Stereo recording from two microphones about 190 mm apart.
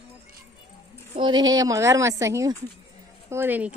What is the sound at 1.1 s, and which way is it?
Speech, 25° right (ahead or behind).